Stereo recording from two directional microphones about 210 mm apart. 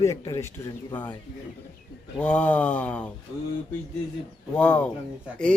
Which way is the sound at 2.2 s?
5° left (ahead or behind).